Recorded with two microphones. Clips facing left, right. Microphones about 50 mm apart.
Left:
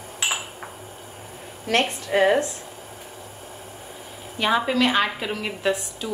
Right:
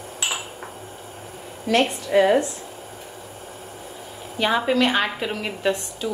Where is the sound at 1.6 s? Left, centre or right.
Left.